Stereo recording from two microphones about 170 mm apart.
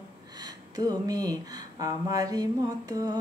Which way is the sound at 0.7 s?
20° right (ahead or behind).